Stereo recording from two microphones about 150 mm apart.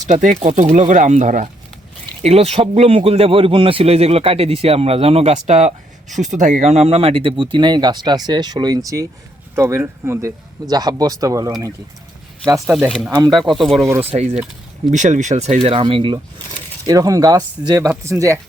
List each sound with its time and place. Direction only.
0.1 s speech: 60° right (ahead or behind)
0.4 s speech: 50° right (ahead or behind)
2.2 s speech: 45° right (ahead or behind); by 11.5 s 25° right (ahead or behind)
13.1 s speech: 25° right (ahead or behind)
13.3 s speech: centre (ahead or behind)
13.7 s speech: 20° right (ahead or behind)
14.8 s speech: 55° right (ahead or behind); by 16.2 s 35° right (ahead or behind)
16.8 s speech: 25° right (ahead or behind)